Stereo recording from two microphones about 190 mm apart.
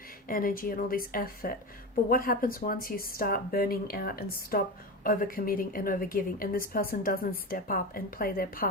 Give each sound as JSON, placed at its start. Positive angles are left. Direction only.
{"t": 0.3, "sound": "a woman's voice", "side_deg": 45}